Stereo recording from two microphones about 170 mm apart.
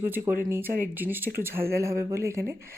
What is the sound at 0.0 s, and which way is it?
Speech, 10° right (ahead or behind).